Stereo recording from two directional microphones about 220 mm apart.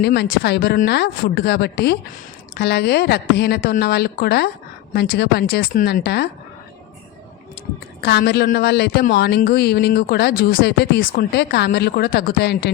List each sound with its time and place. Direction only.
0.0 s a woman's voice: 50° left (ahead or behind)
8.0 s a woman's voice: 50° left (ahead or behind)